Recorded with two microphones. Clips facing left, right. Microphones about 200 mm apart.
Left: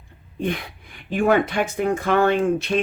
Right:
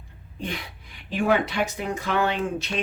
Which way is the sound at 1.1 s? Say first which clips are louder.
Left 4 dB; 50° left (ahead or behind).